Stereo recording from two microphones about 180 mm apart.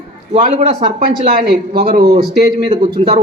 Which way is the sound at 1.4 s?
65° right (ahead or behind).